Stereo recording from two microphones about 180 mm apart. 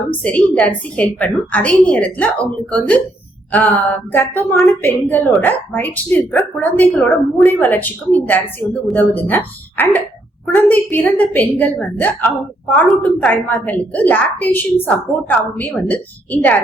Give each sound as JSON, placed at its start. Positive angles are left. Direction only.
{"t": 0.2, "sound": "a woman's voice", "side_deg": 10}